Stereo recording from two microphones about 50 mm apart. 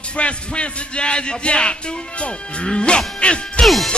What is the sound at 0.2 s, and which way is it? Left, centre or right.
Speech, left.